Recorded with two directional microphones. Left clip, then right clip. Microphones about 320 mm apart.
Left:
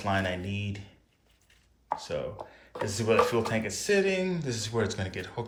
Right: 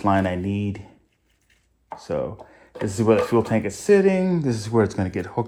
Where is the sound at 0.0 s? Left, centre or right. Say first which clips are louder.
Right 8 dB; centre.